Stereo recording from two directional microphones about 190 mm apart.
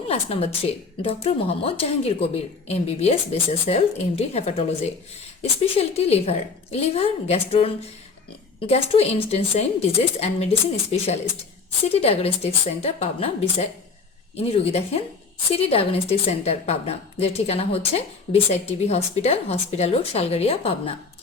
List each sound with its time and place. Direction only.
0.1 s a woman's voice: 30° left (ahead or behind)